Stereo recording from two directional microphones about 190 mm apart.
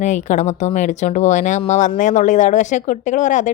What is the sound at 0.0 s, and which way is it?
Speech, 40° left (ahead or behind).